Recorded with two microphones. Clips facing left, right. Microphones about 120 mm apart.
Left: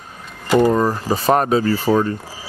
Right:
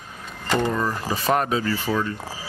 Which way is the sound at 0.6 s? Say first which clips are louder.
Left 9 dB; 40° left (ahead or behind).